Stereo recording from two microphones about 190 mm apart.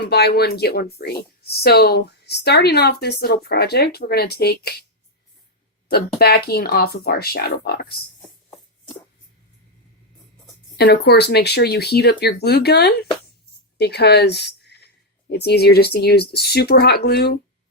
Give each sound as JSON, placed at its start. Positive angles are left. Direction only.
{"t": 0.0, "sound": "speech", "side_deg": 60}
{"t": 5.9, "sound": "speech", "side_deg": 55}
{"t": 10.8, "sound": "speech", "side_deg": 60}